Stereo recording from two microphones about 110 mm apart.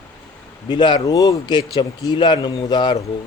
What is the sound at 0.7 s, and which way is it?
Speech, 40° left (ahead or behind).